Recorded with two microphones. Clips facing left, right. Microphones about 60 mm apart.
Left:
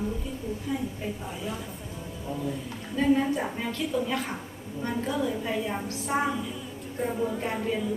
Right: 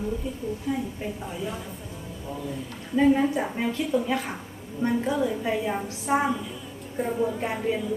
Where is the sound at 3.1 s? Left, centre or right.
Centre.